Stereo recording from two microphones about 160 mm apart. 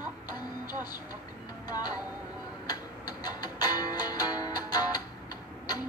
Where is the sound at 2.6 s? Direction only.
25° left (ahead or behind).